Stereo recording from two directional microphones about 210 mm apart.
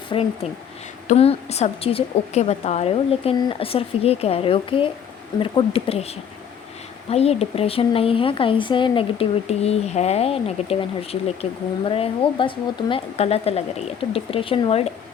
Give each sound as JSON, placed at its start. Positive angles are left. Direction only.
{"t": 0.1, "sound": "speech", "side_deg": 25}